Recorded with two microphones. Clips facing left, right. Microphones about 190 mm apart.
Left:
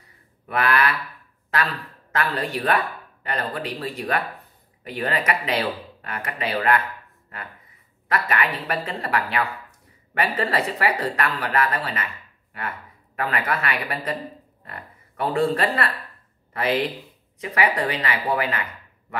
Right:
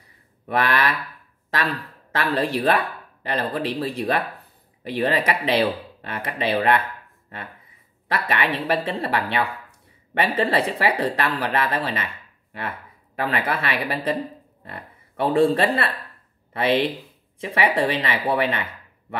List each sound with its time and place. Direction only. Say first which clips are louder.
0.5 s speech: even; 30° right (ahead or behind)
2.1 s speech: right 3 dB; 30° right (ahead or behind)
8.1 s speech: even; 30° right (ahead or behind)
13.2 s speech: right 1 dB; 30° right (ahead or behind)